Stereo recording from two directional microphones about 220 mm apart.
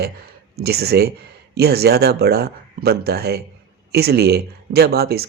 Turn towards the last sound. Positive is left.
turn(degrees=-45)  # may be behind; listen again after turning